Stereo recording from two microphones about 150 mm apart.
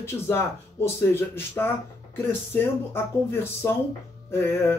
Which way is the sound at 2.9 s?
15° left (ahead or behind).